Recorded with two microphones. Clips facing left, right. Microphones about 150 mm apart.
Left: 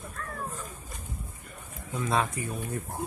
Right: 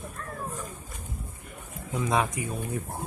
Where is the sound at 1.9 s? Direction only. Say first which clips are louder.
Right 2 dB; 15° right (ahead or behind).